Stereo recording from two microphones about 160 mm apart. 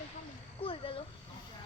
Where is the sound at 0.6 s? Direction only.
35° left (ahead or behind).